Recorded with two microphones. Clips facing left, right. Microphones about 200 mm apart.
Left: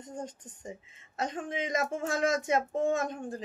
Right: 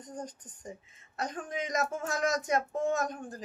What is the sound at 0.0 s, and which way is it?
A woman's voice, 25° left (ahead or behind).